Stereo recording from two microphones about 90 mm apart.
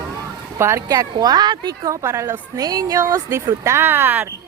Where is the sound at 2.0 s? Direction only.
35° right (ahead or behind).